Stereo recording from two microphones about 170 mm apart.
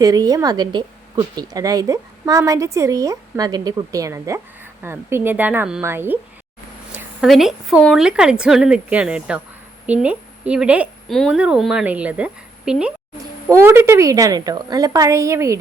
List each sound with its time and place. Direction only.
0.0 s a woman's voice: 20° right (ahead or behind)
6.9 s a woman's voice: 5° right (ahead or behind)